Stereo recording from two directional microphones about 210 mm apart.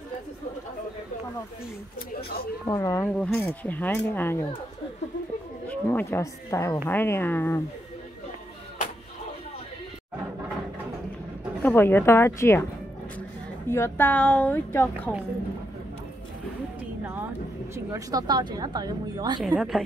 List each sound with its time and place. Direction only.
2.6 s speech: 15° left (ahead or behind)
5.7 s speech: 10° left (ahead or behind)
11.6 s speech: 10° left (ahead or behind)
13.7 s speech: 10° left (ahead or behind)
17.7 s speech: 15° right (ahead or behind)
19.4 s a woman's voice: centre (ahead or behind)